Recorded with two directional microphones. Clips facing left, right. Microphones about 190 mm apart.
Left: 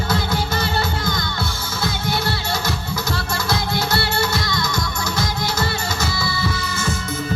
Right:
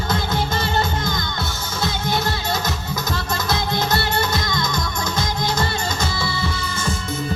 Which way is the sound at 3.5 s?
20° right (ahead or behind).